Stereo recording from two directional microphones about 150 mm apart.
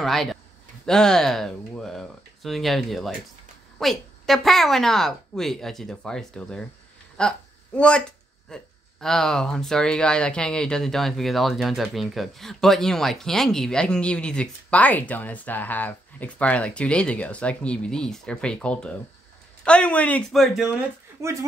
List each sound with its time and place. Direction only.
0.0 s speech: centre (ahead or behind)
7.2 s a sound: 5° left (ahead or behind)
8.5 s speech: 5° left (ahead or behind)
21.2 s speech: 20° right (ahead or behind)